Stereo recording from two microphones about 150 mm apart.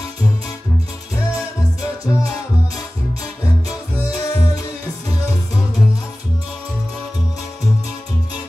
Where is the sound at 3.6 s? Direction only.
25° left (ahead or behind).